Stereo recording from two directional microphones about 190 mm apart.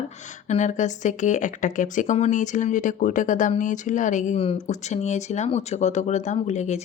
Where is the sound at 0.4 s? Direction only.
40° left (ahead or behind).